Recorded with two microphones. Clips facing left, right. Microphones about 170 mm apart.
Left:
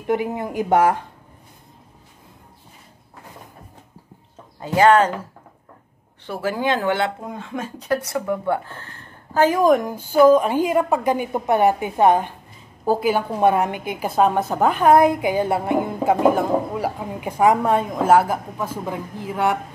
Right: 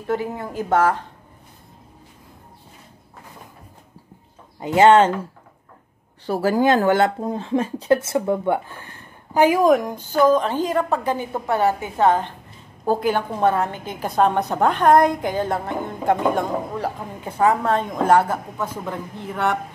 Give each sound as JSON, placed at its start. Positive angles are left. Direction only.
{"t": 0.0, "sound": "a woman's voice", "side_deg": 15}
{"t": 4.6, "sound": "speech", "side_deg": -20}
{"t": 6.2, "sound": "speech", "side_deg": -40}
{"t": 8.6, "sound": "a sound", "side_deg": -15}
{"t": 9.6, "sound": "a woman's voice", "side_deg": 0}
{"t": 12.8, "sound": "a woman's voice", "side_deg": 5}